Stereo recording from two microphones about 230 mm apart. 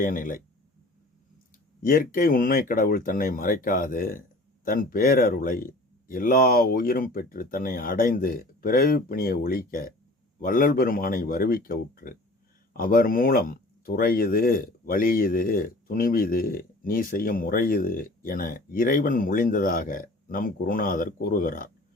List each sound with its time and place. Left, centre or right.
0.0 s speech: left
1.8 s speech: left